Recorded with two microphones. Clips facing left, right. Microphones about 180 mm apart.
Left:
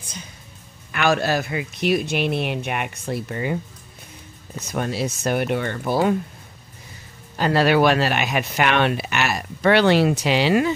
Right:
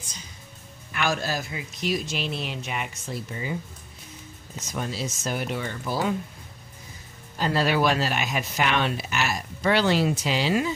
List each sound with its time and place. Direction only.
0.9 s speech: 70° left (ahead or behind)
4.6 s speech: 60° left (ahead or behind)
7.3 s speech: 70° left (ahead or behind)